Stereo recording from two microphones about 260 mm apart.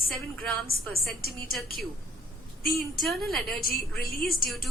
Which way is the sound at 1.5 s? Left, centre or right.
Centre.